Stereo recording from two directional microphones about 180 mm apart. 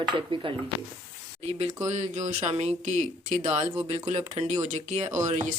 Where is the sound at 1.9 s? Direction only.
40° right (ahead or behind).